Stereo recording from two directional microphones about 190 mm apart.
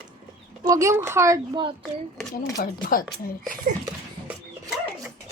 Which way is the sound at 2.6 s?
50° left (ahead or behind).